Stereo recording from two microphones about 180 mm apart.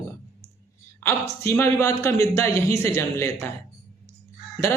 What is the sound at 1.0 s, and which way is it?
A woman's voice, 15° left (ahead or behind).